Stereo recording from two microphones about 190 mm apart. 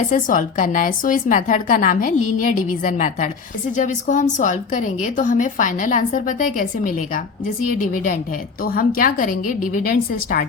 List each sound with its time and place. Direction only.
0.1 s a woman's voice: 45° left (ahead or behind)